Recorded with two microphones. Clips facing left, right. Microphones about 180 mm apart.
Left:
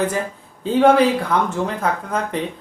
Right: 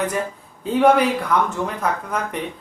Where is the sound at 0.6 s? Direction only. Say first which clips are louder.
Left 2 dB; 30° left (ahead or behind).